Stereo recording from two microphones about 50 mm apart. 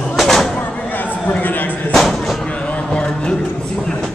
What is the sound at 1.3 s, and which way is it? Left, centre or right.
Speech, left.